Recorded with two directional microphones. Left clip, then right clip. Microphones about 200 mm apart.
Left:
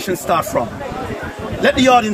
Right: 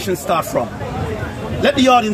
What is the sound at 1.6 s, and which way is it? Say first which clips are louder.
Speech: left 1 dB; 20° left (ahead or behind).